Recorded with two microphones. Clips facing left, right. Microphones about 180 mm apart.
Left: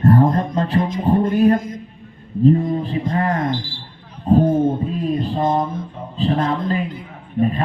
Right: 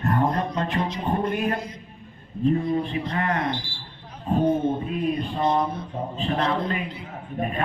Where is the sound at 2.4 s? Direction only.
35° left (ahead or behind).